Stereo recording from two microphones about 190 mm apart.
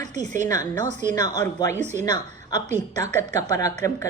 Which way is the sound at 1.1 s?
20° left (ahead or behind).